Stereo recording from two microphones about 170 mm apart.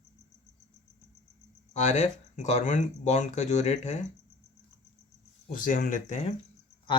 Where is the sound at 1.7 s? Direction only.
45° left (ahead or behind).